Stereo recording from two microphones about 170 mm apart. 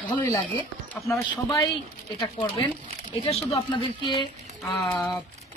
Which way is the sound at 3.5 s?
30° left (ahead or behind).